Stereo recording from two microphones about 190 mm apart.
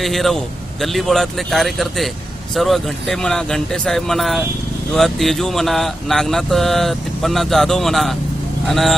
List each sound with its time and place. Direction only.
0.0 s speech: centre (ahead or behind)